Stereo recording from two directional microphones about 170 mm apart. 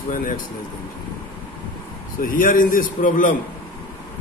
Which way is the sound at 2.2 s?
55° left (ahead or behind).